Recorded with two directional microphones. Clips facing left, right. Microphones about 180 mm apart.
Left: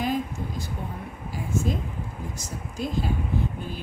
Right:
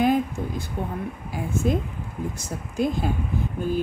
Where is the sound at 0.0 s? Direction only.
55° right (ahead or behind).